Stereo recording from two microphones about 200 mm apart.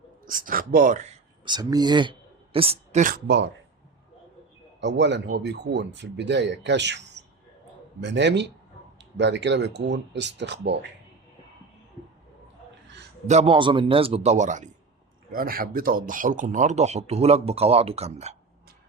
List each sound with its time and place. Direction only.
0.3 s speech: 45° right (ahead or behind)
1.5 s speech: 20° right (ahead or behind)
3.2 s speech: 60° right (ahead or behind)
4.8 s speech: 60° right (ahead or behind)
8.0 s speech: 60° right (ahead or behind)
13.2 s speech: 35° right (ahead or behind)